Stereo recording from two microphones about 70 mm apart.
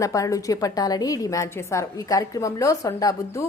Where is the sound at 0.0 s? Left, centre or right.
Left.